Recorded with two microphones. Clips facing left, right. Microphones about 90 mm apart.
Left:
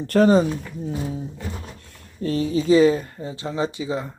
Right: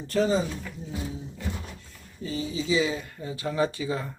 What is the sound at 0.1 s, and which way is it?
Speech, 65° left (ahead or behind).